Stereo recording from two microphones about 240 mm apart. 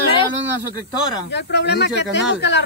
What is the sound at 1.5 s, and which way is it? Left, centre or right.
Speech, left.